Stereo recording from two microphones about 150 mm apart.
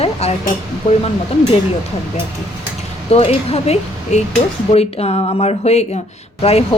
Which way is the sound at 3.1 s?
40° left (ahead or behind).